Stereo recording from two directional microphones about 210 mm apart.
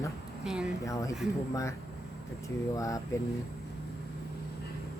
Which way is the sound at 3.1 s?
15° left (ahead or behind).